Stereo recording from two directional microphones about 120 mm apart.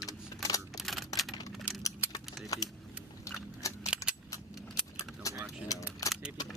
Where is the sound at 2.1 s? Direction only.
30° left (ahead or behind).